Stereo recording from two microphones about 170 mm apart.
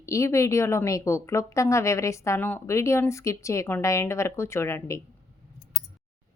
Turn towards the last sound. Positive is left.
turn(degrees=15)  # may be behind; listen again after turning